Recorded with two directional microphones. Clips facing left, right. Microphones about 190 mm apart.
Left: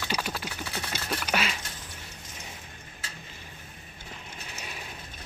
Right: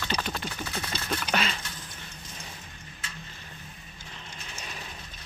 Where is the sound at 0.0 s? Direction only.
10° left (ahead or behind).